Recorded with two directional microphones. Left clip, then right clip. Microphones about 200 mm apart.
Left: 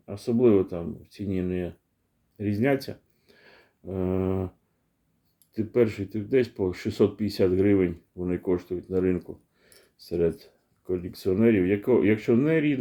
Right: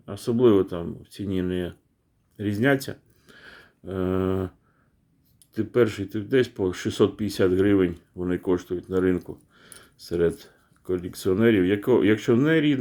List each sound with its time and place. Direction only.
0.0 s speech: 20° right (ahead or behind)
2.4 s a sound: 20° right (ahead or behind)
5.5 s speech: 15° right (ahead or behind)